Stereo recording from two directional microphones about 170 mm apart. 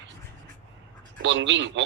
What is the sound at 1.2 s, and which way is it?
Speech, 90° right.